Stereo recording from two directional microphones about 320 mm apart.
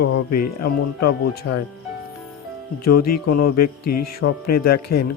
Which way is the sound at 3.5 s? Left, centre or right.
Left.